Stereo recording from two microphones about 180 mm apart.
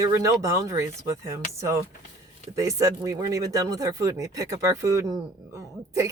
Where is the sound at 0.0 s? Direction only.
15° right (ahead or behind).